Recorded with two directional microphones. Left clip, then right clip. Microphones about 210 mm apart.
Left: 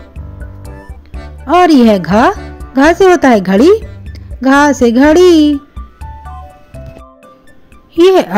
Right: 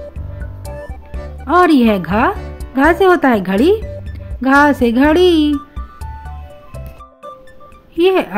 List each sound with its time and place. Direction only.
0.7 s music: centre (ahead or behind)
1.5 s a child's voice: 15° left (ahead or behind)
2.4 s music: centre (ahead or behind)
2.7 s a child's voice: 15° left (ahead or behind)
7.9 s music: 20° left (ahead or behind)